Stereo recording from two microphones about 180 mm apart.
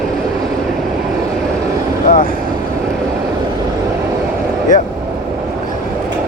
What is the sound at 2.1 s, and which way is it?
Speech, 50° left (ahead or behind).